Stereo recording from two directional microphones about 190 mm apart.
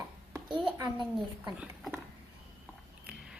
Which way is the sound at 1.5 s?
10° right (ahead or behind).